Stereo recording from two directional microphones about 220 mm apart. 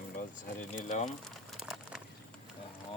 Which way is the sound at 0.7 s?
35° left (ahead or behind).